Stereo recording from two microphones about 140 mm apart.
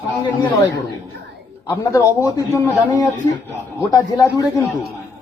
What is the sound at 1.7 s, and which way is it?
A man's voice, 20° left (ahead or behind).